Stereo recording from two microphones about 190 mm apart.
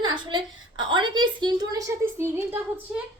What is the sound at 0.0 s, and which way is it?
A woman's voice, 25° right (ahead or behind).